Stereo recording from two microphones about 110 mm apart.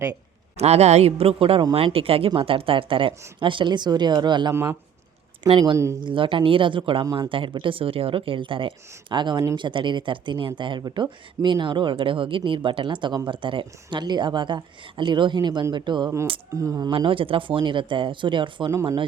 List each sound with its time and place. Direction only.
0.5 s a man's voice: 75° right (ahead or behind); by 4.5 s 40° right (ahead or behind)
4.5 s speech: 20° right (ahead or behind)
6.0 s speech: 50° right (ahead or behind)
7.0 s speech: 35° right (ahead or behind)
7.3 s speech: 50° right (ahead or behind)
16.6 s speech: 30° right (ahead or behind)
16.9 s speech: 55° right (ahead or behind)